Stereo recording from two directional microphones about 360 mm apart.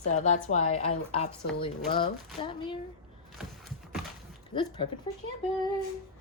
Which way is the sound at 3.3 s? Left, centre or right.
Centre.